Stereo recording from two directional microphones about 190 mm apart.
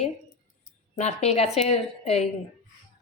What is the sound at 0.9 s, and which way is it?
A woman's voice, 35° left (ahead or behind).